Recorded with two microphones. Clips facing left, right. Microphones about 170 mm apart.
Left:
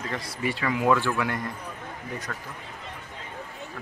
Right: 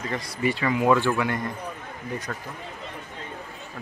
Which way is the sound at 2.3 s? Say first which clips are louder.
Right 3 dB; 15° right (ahead or behind).